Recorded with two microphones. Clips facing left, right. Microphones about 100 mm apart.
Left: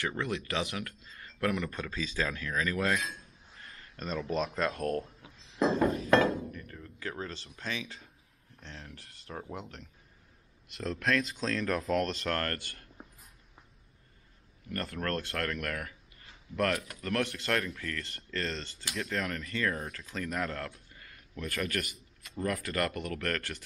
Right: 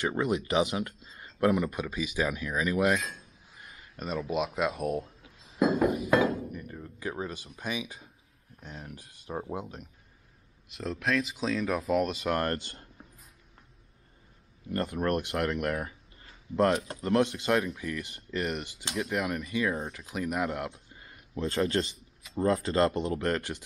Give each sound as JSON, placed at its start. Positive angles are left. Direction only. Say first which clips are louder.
{"t": 0.0, "sound": "speech", "louder": "right 5 dB", "side_deg": -20}
{"t": 3.0, "sound": "speech", "louder": "even", "side_deg": 0}
{"t": 3.5, "sound": "speech", "louder": "right 2 dB", "side_deg": -10}
{"t": 5.6, "sound": "a sound", "louder": "right 2 dB", "side_deg": -10}
{"t": 8.5, "sound": "speech", "louder": "right 4 dB", "side_deg": -15}
{"t": 10.7, "sound": "speech", "louder": "right 1 dB", "side_deg": 0}
{"t": 12.4, "sound": "speech", "louder": "right 5 dB", "side_deg": -15}
{"t": 14.7, "sound": "speech", "louder": "right 6 dB", "side_deg": -20}